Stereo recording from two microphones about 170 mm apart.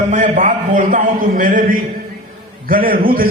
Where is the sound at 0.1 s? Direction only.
50° right (ahead or behind).